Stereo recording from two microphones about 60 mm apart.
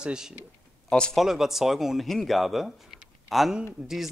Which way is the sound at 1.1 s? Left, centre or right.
Centre.